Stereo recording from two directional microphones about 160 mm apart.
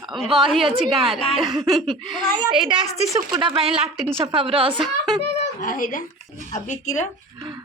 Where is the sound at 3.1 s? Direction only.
30° right (ahead or behind).